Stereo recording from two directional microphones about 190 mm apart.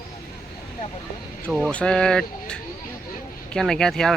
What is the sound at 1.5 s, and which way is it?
Speech, centre (ahead or behind).